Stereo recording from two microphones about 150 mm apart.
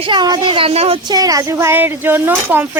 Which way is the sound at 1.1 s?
25° right (ahead or behind).